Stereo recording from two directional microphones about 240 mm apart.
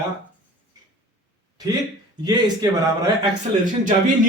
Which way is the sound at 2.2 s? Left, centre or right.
Centre.